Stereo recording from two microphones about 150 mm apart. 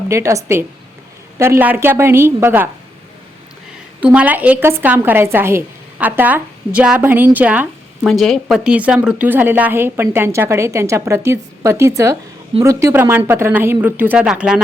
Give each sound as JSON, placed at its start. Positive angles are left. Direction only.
{"t": 0.1, "sound": "a woman's voice", "side_deg": -20}
{"t": 4.0, "sound": "a woman's voice", "side_deg": -10}
{"t": 8.0, "sound": "a woman's voice", "side_deg": 0}